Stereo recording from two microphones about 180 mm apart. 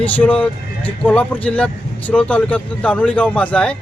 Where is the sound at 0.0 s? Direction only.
10° left (ahead or behind).